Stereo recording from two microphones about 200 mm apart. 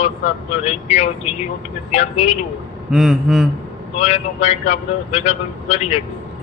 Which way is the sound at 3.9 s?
30° left (ahead or behind).